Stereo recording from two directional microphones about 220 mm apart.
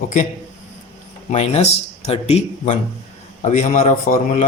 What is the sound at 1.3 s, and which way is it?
A man's voice, 30° left (ahead or behind).